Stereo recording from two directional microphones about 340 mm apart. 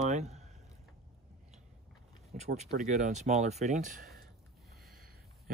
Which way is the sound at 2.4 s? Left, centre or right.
Right.